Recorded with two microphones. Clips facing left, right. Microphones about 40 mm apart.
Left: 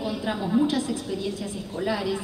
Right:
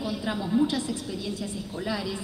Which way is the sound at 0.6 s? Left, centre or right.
Left.